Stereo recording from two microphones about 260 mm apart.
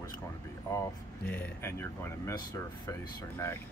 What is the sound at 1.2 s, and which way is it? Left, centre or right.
Speech, centre.